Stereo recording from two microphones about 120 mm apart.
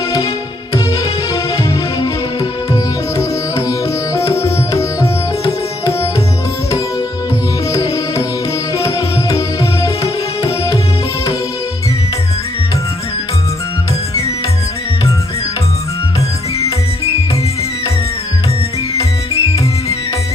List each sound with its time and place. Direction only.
3.2 s music: 25° left (ahead or behind)
7.7 s music: 25° left (ahead or behind)
9.8 s music: 25° left (ahead or behind)
18.9 s music: 25° left (ahead or behind)